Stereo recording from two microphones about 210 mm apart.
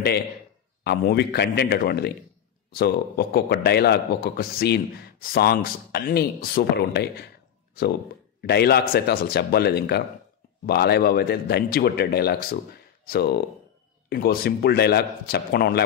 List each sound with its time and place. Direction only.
0.8 s a man's voice: 50° left (ahead or behind)
8.4 s a man's voice: 50° left (ahead or behind)